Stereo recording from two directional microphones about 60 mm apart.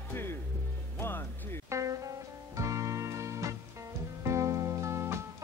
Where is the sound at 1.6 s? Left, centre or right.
Right.